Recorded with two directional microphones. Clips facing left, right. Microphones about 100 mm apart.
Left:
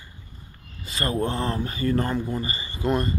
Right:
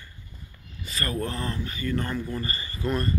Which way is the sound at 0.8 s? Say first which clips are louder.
Left 4 dB; 30° left (ahead or behind).